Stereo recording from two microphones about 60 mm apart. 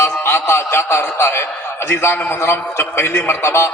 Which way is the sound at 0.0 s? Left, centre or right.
Left.